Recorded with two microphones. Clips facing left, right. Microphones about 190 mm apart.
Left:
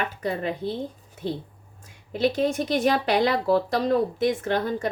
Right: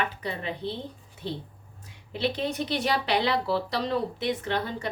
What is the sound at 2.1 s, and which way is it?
Speech, 45° left (ahead or behind).